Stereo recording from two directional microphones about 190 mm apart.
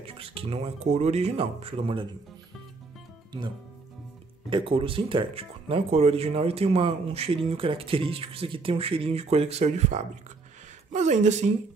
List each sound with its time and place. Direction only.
0.0 s speech: 30° right (ahead or behind)
4.5 s speech: 25° right (ahead or behind)